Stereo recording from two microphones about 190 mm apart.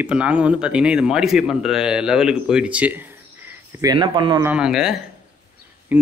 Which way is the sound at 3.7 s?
20° right (ahead or behind).